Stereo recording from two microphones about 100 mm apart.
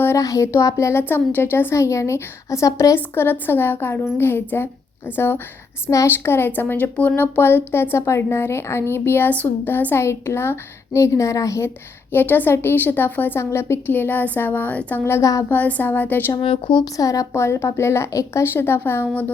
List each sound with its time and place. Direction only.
0.0 s a woman's voice: 30° left (ahead or behind)
12.1 s a woman's voice: 20° left (ahead or behind)
15.4 s a woman's voice: 20° left (ahead or behind)
16.3 s speech: 60° left (ahead or behind)
17.0 s a woman's voice: 35° left (ahead or behind)